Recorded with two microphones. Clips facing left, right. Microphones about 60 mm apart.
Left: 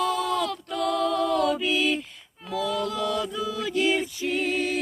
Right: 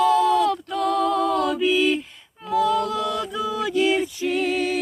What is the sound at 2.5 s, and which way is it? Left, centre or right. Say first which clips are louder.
A capella: right 7 dB; right.